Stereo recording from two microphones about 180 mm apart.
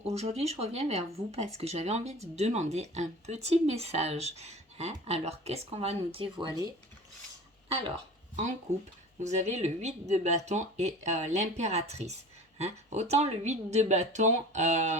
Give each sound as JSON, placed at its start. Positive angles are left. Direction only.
{"t": 0.0, "sound": "speech", "side_deg": -35}
{"t": 9.2, "sound": "speech", "side_deg": -40}